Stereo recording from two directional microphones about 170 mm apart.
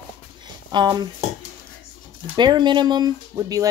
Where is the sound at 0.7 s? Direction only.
25° right (ahead or behind).